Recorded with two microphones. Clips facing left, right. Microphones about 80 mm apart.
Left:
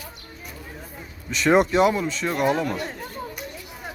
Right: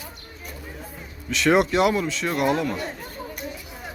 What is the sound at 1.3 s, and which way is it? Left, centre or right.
Speech, centre.